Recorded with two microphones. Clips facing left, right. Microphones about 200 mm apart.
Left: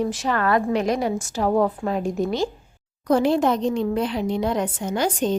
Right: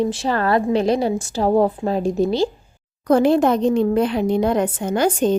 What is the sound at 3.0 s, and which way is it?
A woman's voice, 55° right (ahead or behind).